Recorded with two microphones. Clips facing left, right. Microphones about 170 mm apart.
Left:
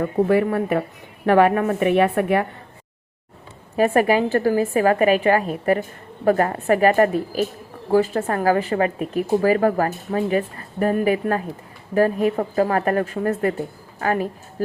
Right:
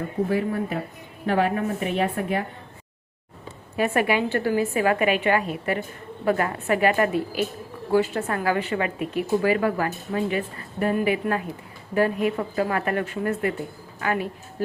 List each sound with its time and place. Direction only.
0.0 s a woman's voice: 70° left (ahead or behind)
3.8 s speech: 40° left (ahead or behind)